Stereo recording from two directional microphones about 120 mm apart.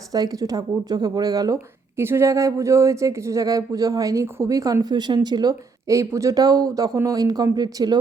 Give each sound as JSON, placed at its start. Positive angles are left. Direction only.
{"t": 0.1, "sound": "speech", "side_deg": -30}
{"t": 2.0, "sound": "speech", "side_deg": -20}